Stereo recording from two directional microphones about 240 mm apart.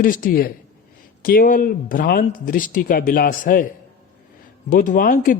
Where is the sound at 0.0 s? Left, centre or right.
Left.